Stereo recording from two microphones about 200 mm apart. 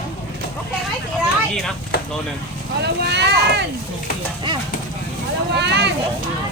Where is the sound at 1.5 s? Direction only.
5° left (ahead or behind).